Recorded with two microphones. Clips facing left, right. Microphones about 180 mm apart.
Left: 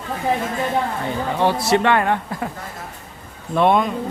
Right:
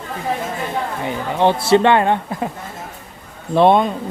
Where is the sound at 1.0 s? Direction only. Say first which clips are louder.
Right 7 dB; 20° right (ahead or behind).